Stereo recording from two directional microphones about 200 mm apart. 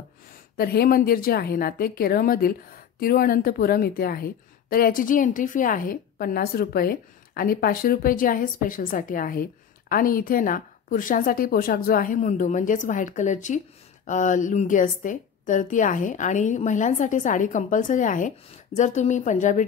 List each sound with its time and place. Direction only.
0.6 s a woman's voice: 50° left (ahead or behind)